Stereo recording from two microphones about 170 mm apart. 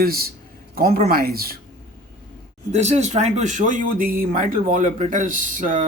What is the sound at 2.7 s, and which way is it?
Speech, 40° right (ahead or behind).